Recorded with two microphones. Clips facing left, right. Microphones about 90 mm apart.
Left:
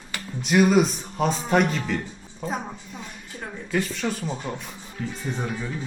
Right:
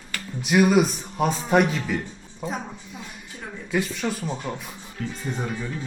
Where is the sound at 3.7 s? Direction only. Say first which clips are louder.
Even; 5° right (ahead or behind).